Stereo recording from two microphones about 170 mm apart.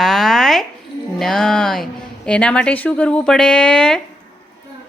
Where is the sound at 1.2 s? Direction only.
5° left (ahead or behind).